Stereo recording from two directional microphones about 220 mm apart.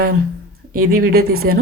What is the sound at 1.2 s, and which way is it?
Speech, 75° right (ahead or behind).